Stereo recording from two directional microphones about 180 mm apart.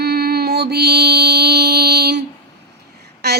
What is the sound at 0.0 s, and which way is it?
Mantra, 60° right (ahead or behind).